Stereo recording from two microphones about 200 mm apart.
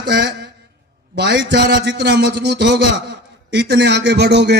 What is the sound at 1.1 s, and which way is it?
A man's voice, 60° right (ahead or behind).